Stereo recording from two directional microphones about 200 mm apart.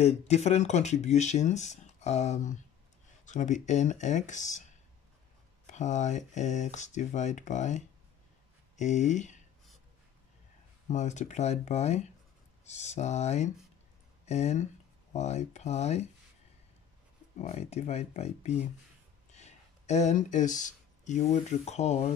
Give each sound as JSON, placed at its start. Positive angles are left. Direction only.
{"t": 0.0, "sound": "speech", "side_deg": 30}
{"t": 5.7, "sound": "speech", "side_deg": 35}
{"t": 10.9, "sound": "speech", "side_deg": 35}
{"t": 17.4, "sound": "speech", "side_deg": 35}